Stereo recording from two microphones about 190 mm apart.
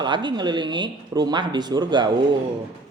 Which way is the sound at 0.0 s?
25° right (ahead or behind).